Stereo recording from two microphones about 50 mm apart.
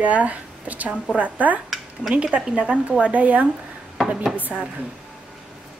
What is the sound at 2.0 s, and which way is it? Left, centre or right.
A woman's voice, right.